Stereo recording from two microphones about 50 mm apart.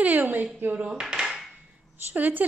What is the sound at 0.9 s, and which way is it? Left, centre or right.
Dishes, centre.